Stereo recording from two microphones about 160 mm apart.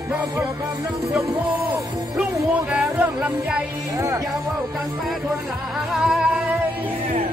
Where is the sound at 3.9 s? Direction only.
20° right (ahead or behind).